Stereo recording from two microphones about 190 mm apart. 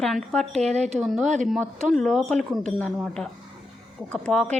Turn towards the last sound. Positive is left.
turn(degrees=5)  # may be behind; listen again after turning